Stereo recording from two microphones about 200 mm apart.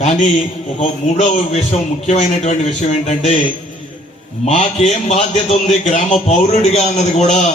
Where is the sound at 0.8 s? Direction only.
35° left (ahead or behind).